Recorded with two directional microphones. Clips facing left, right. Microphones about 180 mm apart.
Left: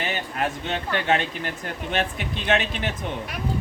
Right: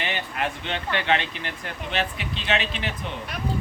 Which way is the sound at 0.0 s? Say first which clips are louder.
Left 1 dB; 40° left (ahead or behind).